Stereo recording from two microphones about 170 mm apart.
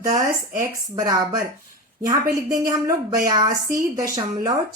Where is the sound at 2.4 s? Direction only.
20° right (ahead or behind).